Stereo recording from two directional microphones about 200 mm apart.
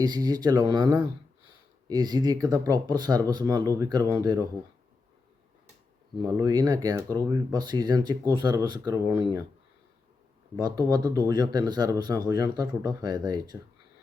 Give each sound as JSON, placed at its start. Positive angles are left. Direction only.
{"t": 0.0, "sound": "speech", "side_deg": -20}
{"t": 6.2, "sound": "speech", "side_deg": -20}
{"t": 10.6, "sound": "speech", "side_deg": -20}